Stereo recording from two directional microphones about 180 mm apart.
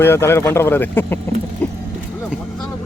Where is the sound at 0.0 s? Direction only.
15° left (ahead or behind).